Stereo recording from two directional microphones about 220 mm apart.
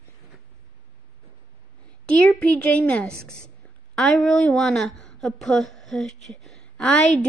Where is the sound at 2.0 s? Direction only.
5° left (ahead or behind).